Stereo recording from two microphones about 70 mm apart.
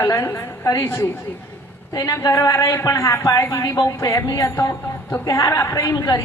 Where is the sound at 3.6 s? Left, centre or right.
Left.